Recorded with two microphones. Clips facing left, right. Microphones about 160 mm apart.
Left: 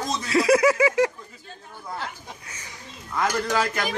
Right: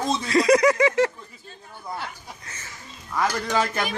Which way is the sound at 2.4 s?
10° left (ahead or behind).